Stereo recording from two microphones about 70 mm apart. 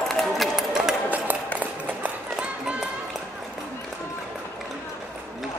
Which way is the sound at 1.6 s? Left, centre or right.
Centre.